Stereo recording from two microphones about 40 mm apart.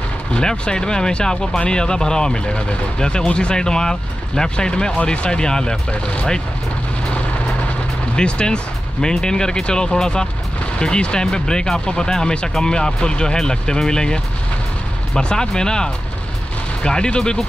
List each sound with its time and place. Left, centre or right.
0.3 s speech: left
8.2 s speech: left